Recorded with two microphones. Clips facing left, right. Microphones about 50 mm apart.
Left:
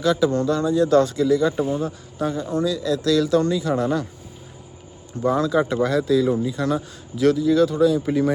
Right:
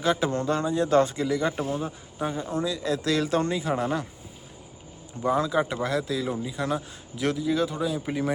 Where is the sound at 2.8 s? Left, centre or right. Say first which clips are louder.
Left 5 dB; right.